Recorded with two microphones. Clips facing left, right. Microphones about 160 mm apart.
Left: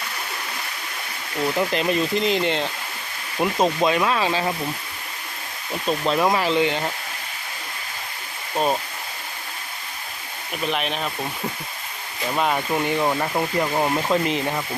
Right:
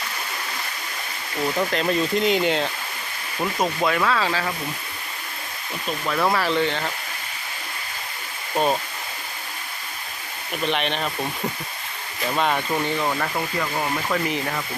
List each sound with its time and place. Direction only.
1.5 s speech: 5° left (ahead or behind)
3.4 s speech: 15° left (ahead or behind)
6.1 s speech: 15° left (ahead or behind)
8.5 s speech: centre (ahead or behind)
10.5 s speech: centre (ahead or behind)
12.2 s speech: 5° left (ahead or behind)